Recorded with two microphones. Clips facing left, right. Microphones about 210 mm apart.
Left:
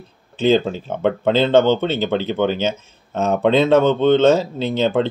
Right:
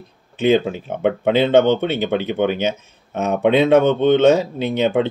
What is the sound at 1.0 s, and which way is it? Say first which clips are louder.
Speech: even; 10° right (ahead or behind).